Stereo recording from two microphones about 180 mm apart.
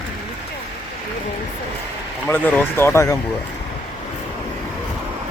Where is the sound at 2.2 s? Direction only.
10° left (ahead or behind).